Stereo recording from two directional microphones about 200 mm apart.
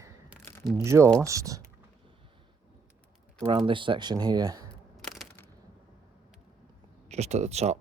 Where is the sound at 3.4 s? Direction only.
25° right (ahead or behind).